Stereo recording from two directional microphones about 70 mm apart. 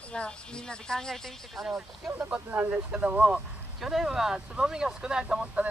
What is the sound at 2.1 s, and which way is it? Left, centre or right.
Speech, right.